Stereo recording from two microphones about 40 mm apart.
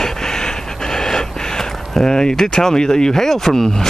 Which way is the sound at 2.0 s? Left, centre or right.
Centre.